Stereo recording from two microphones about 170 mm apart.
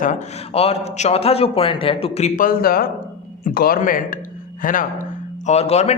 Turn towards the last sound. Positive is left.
turn(degrees=40)  # may be behind; listen again after turning